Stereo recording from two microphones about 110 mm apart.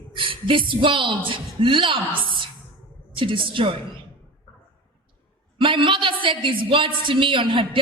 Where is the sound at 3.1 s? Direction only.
50° right (ahead or behind).